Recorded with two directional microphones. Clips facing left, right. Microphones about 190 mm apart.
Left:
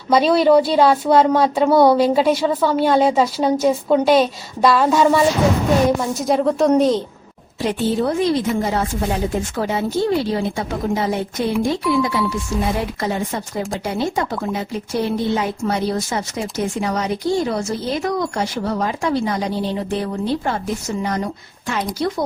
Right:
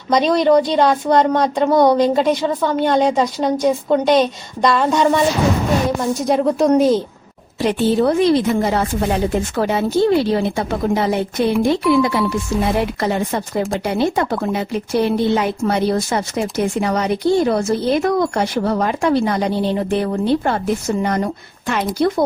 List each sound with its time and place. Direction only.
0.1 s a woman's voice: 5° left (ahead or behind)
7.6 s speech: 75° right (ahead or behind); by 22.2 s 55° right (ahead or behind)